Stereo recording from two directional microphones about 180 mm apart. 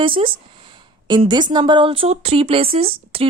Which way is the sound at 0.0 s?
30° right (ahead or behind).